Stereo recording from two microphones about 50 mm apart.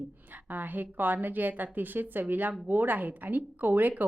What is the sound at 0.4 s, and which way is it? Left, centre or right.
A woman's voice, right.